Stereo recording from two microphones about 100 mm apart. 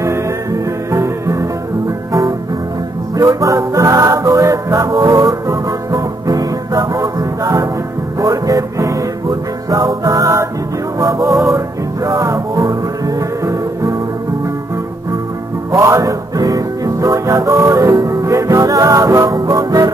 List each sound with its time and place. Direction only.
0.0 s music: 30° right (ahead or behind)
3.2 s music: 35° right (ahead or behind)
15.7 s music: 30° right (ahead or behind)